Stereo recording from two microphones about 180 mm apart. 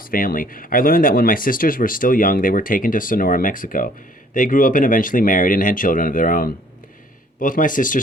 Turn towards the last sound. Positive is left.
turn(degrees=45)  # may be behind; listen again after turning